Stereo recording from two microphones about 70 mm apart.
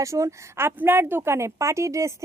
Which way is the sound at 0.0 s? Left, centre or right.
Right.